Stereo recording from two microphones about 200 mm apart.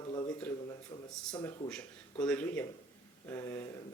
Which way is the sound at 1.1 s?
5° left (ahead or behind).